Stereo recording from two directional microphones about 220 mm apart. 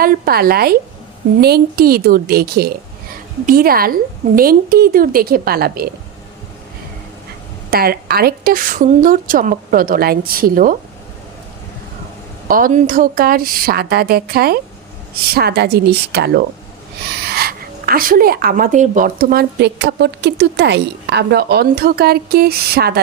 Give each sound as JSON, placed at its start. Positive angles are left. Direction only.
{"t": 0.0, "sound": "a woman's voice", "side_deg": -45}
{"t": 7.7, "sound": "a woman's voice", "side_deg": -45}
{"t": 12.5, "sound": "a woman's voice", "side_deg": -40}